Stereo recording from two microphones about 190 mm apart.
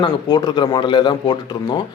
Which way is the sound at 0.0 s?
20° left (ahead or behind).